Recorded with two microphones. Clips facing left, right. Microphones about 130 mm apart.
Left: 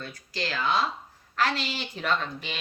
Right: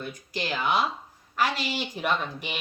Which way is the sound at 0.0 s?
15° right (ahead or behind).